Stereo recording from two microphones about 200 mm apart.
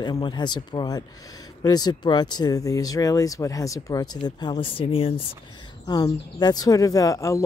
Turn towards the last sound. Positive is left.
turn(degrees=15)  # may be behind; listen again after turning